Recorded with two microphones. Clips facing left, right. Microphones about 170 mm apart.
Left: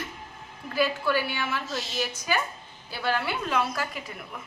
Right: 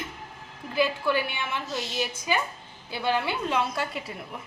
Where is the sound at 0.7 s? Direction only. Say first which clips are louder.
Even; 20° right (ahead or behind).